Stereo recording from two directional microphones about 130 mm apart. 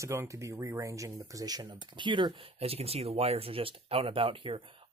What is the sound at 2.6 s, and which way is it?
Speech, 50° right (ahead or behind).